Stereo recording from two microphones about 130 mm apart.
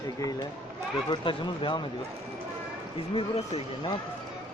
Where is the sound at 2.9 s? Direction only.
45° left (ahead or behind).